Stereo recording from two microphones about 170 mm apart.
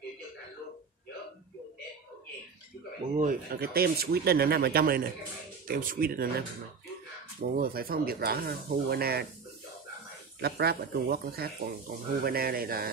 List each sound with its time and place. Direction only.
3.2 s speech: 60° right (ahead or behind)
7.4 s speech: 60° right (ahead or behind)
10.4 s speech: 65° right (ahead or behind)